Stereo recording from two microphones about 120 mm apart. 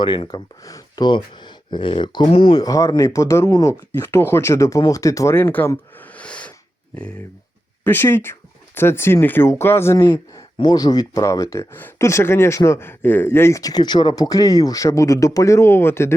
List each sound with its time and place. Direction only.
0.0 s speech: 40° left (ahead or behind)
2.6 s speech: 30° left (ahead or behind); by 6.5 s 10° left (ahead or behind)
7.9 s speech: 20° left (ahead or behind)
10.6 s speech: 35° left (ahead or behind); by 16.1 s 20° left (ahead or behind)